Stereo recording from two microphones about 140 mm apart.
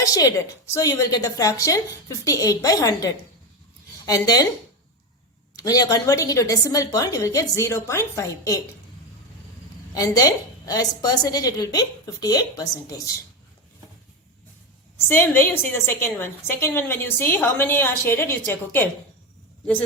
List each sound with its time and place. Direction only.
0.0 s a woman's voice: 25° left (ahead or behind)
5.5 s a woman's voice: 25° left (ahead or behind)
9.9 s a woman's voice: 25° left (ahead or behind)
14.9 s a woman's voice: 15° left (ahead or behind)